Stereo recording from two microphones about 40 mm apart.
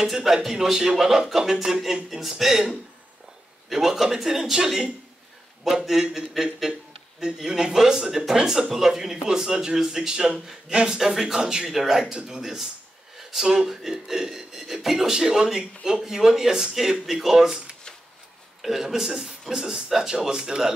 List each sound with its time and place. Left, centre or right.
0.0 s a man's voice: centre
8.6 s speech: centre
18.6 s speech: centre